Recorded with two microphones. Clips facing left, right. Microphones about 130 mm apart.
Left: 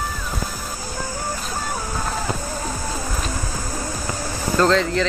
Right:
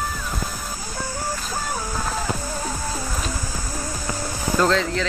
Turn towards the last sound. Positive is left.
turn(degrees=0)  # may be behind; listen again after turning